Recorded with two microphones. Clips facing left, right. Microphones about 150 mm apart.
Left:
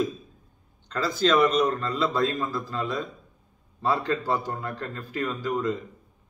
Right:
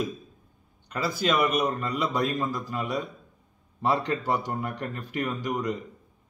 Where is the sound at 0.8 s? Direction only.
10° right (ahead or behind).